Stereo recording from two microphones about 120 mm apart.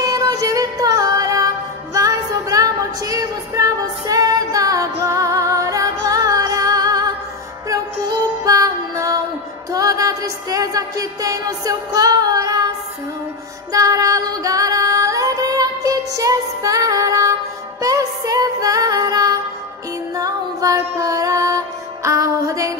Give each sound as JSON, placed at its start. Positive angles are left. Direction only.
{"t": 0.0, "sound": "music", "side_deg": -30}
{"t": 13.7, "sound": "music", "side_deg": -30}